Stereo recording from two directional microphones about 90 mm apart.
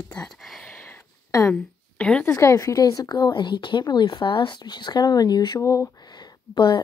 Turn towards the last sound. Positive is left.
turn(degrees=60)  # may be behind; listen again after turning